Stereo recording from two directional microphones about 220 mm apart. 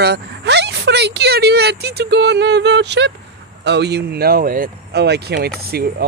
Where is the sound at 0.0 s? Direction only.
50° right (ahead or behind).